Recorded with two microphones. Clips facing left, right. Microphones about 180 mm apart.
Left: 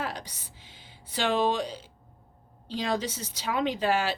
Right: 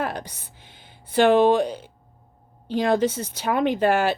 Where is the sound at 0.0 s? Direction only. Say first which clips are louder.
Right 6 dB; 55° right (ahead or behind).